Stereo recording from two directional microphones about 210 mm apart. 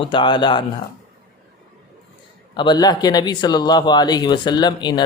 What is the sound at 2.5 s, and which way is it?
Speech, 20° left (ahead or behind).